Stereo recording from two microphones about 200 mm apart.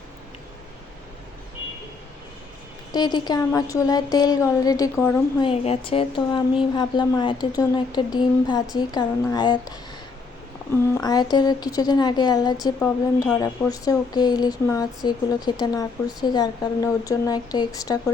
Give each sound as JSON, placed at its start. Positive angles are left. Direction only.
{"t": 2.9, "sound": "a woman's voice", "side_deg": 20}
{"t": 5.4, "sound": "speech", "side_deg": 30}
{"t": 10.9, "sound": "a woman's voice", "side_deg": 20}